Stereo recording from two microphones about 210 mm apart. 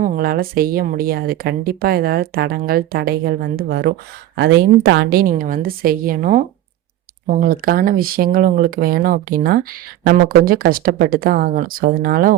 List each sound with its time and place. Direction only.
0.0 s speech: 40° right (ahead or behind)